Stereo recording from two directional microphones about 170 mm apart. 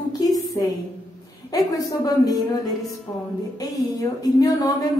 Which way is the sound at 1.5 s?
20° left (ahead or behind).